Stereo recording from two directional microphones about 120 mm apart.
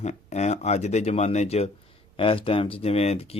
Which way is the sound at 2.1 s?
50° left (ahead or behind).